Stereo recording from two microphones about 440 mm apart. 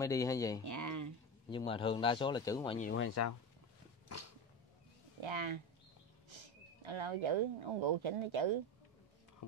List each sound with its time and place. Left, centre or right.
0.0 s speech: centre
0.7 s a sound: right
1.5 s speech: centre
2.9 s speech: left
5.2 s speech: right
9.4 s whispering: left